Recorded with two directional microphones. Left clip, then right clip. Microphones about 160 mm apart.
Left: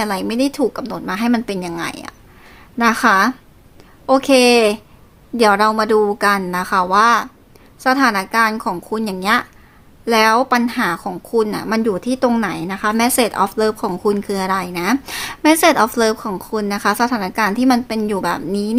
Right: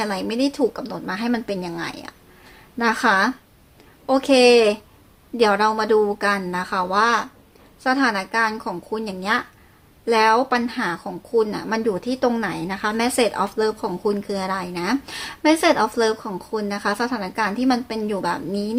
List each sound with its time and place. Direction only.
0.0 s speech: 40° left (ahead or behind)